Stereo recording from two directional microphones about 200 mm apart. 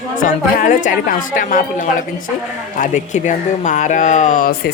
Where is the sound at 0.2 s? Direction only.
40° left (ahead or behind).